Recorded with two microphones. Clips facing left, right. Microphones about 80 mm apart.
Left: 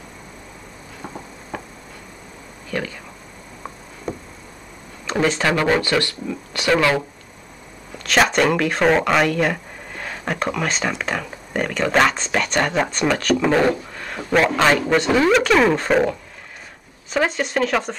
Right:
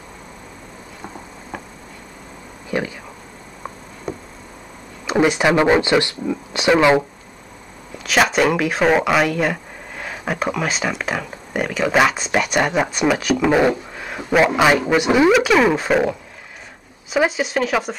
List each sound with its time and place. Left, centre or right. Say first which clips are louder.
1.5 s insect: left 1 dB; centre
2.7 s speech: right 3 dB; centre
4.1 s insect: even; centre
5.0 s speech: right 3 dB; centre
8.0 s speech: right 1 dB; centre